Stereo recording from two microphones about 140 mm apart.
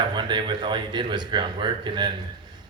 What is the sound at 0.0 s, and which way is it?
A man's voice, 35° right (ahead or behind).